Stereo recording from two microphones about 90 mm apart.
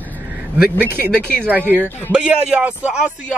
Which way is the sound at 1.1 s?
15° left (ahead or behind).